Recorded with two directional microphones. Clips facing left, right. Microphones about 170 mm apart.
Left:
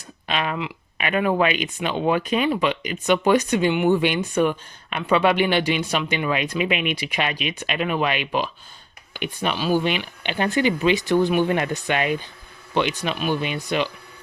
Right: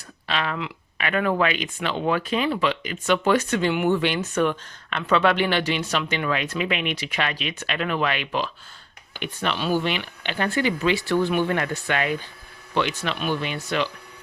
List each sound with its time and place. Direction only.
0.3 s speech: 15° left (ahead or behind)